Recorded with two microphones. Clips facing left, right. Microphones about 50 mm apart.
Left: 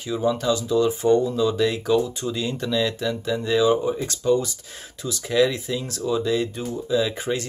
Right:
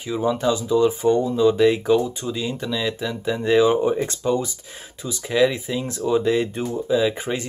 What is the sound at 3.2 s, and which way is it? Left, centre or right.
Speech, right.